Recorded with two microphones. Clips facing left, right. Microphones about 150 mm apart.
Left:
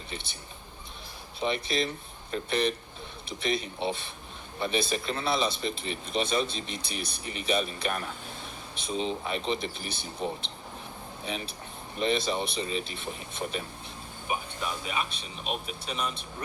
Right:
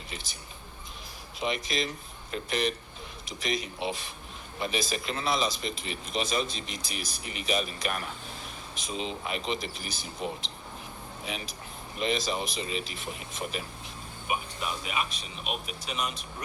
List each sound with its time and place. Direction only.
1.4 s speech: 35° left (ahead or behind)
11.9 s speech: 35° left (ahead or behind)